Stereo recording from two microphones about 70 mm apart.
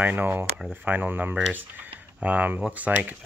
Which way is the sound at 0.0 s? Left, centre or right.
Right.